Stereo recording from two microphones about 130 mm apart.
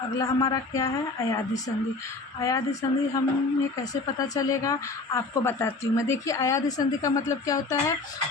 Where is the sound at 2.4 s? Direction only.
25° left (ahead or behind).